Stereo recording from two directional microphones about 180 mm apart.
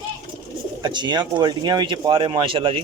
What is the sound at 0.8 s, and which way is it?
Speech, 25° right (ahead or behind).